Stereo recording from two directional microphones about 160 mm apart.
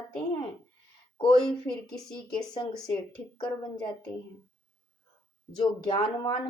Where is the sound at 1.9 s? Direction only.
5° left (ahead or behind).